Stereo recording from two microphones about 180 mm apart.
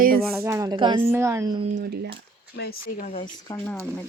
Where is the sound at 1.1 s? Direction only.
15° right (ahead or behind).